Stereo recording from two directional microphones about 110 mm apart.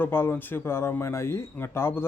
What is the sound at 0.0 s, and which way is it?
A man's voice, 20° left (ahead or behind).